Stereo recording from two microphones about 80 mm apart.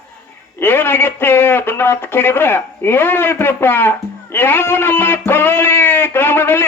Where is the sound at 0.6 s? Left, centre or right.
Left.